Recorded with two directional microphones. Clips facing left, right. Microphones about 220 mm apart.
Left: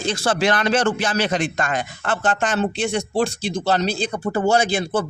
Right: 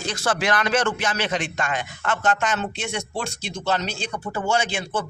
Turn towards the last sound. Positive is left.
turn(degrees=35)  # may be behind; listen again after turning